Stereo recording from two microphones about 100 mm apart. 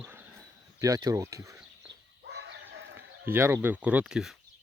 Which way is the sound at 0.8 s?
35° right (ahead or behind).